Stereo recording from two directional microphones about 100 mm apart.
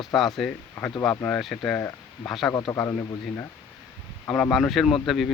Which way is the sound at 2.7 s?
25° left (ahead or behind).